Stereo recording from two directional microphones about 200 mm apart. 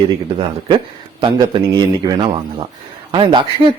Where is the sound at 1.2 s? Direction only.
25° right (ahead or behind).